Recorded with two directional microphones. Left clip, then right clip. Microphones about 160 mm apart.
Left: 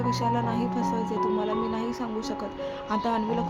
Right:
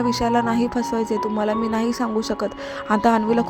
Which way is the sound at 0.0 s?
35° right (ahead or behind).